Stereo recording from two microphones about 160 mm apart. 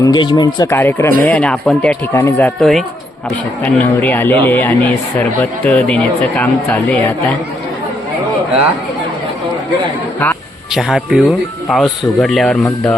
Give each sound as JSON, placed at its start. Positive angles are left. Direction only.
{"t": 0.0, "sound": "speech", "side_deg": 25}
{"t": 0.7, "sound": "speech", "side_deg": 15}
{"t": 2.6, "sound": "speech", "side_deg": 0}
{"t": 10.8, "sound": "speech", "side_deg": 0}